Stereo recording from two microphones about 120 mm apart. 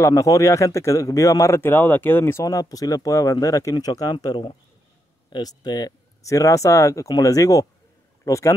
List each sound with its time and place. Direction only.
0.0 s speech: 25° left (ahead or behind)
2.4 s speech: 30° left (ahead or behind)